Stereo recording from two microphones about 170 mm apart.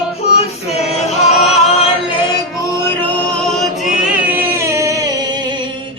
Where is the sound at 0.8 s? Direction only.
Centre (ahead or behind).